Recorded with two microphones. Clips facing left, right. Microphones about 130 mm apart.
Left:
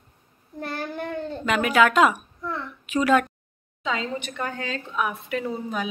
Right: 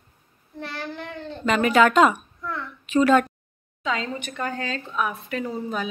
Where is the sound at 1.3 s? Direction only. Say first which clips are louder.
Right 3 dB; 5° left (ahead or behind).